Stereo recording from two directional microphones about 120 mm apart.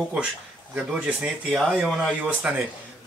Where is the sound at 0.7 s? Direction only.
5° right (ahead or behind).